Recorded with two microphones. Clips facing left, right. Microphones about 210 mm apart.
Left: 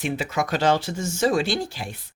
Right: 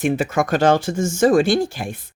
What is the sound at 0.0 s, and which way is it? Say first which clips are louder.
Speech: right 7 dB; 50° right (ahead or behind).